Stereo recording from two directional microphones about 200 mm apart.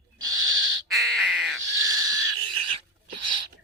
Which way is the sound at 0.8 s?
Centre (ahead or behind).